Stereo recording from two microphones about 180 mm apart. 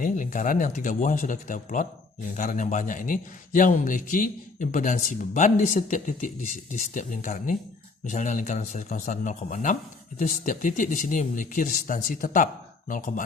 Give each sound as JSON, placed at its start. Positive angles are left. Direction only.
{"t": 0.0, "sound": "a man's voice", "side_deg": 45}